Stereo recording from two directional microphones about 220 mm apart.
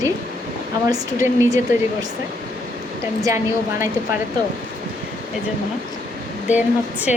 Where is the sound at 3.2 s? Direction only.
15° right (ahead or behind).